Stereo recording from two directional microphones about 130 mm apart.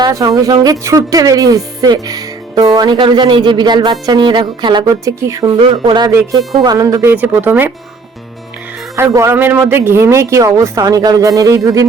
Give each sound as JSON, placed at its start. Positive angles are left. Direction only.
{"t": 0.0, "sound": "speech", "side_deg": -25}
{"t": 5.5, "sound": "speech", "side_deg": -40}
{"t": 9.0, "sound": "speech", "side_deg": -20}